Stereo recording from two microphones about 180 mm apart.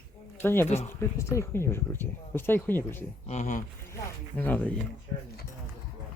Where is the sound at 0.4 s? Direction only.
10° left (ahead or behind).